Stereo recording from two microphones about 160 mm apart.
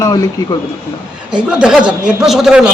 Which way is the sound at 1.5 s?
5° right (ahead or behind).